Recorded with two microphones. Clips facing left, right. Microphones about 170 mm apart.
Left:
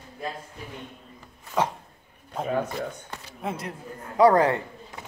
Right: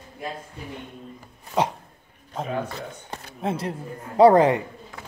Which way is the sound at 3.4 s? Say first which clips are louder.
Right 5 dB; 30° right (ahead or behind).